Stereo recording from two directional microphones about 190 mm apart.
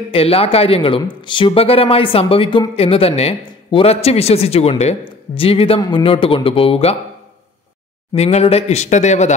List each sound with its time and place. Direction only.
0.1 s speech: 30° left (ahead or behind)
8.1 s speech: 35° left (ahead or behind)